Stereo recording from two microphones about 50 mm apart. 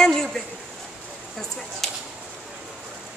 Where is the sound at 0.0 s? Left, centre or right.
Centre.